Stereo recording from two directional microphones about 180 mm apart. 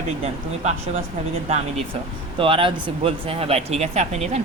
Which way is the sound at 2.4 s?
30° right (ahead or behind).